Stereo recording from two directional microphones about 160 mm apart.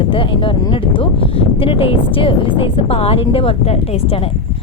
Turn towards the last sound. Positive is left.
turn(degrees=35)  # may be behind; listen again after turning